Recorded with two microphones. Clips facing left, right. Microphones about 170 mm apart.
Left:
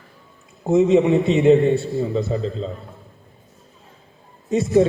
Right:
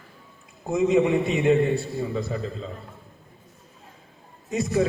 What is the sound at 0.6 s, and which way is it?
A man's voice, 25° left (ahead or behind).